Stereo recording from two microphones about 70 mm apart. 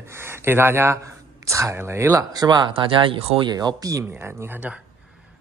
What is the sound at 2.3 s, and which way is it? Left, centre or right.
Speech, right.